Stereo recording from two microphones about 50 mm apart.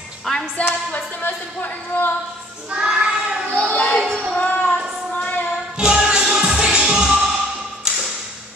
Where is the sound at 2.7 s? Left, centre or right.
Centre.